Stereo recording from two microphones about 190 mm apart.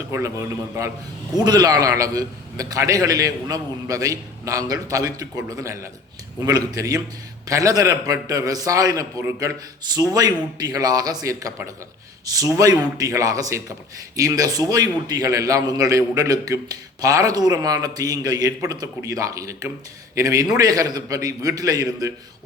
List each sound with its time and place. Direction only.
0.1 s a man's voice: 15° right (ahead or behind)